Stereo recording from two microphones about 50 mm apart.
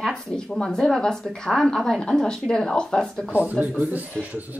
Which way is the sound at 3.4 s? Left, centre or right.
Right.